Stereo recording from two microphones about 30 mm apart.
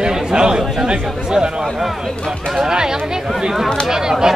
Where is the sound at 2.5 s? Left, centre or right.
Right.